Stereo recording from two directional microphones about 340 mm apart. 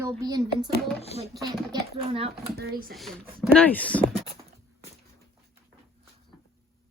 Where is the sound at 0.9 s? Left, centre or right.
Centre.